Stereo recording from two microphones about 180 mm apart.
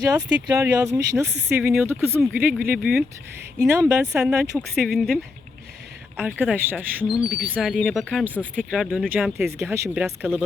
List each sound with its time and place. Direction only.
0.0 s speech: 20° right (ahead or behind)
4.6 s speech: centre (ahead or behind)
6.4 s speech: 10° right (ahead or behind)
9.6 s speech: 15° right (ahead or behind)